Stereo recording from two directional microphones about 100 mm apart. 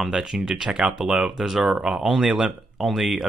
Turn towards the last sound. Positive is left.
turn(degrees=0)  # may be behind; listen again after turning